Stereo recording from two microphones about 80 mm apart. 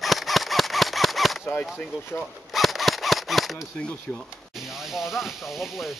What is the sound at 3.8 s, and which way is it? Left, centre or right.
Speech, centre.